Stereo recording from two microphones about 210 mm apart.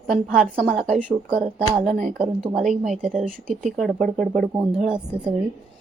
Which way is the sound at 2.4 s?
30° right (ahead or behind).